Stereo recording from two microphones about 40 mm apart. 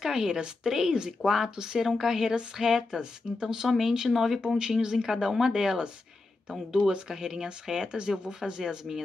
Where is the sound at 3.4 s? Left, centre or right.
Centre.